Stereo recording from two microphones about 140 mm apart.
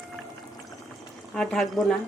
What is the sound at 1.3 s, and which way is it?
Speech, 5° left (ahead or behind).